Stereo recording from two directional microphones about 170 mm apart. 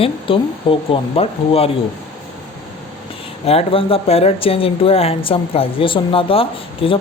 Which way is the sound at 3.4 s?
35° left (ahead or behind).